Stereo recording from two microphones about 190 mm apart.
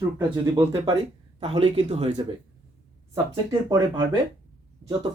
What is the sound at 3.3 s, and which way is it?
Speech, 25° right (ahead or behind).